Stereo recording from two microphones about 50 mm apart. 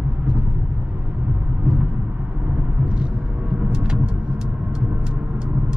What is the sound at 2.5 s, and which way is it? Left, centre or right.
Vehicle, right.